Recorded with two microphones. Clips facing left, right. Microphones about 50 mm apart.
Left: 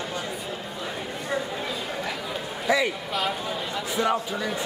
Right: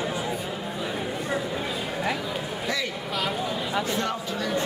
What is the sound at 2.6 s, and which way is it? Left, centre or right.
Speech, centre.